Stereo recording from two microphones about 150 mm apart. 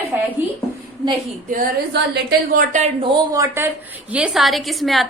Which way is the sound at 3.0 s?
35° right (ahead or behind).